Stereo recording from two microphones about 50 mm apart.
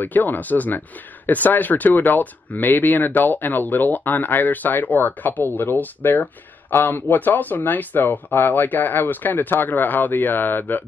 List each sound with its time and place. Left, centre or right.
0.0 s speech: left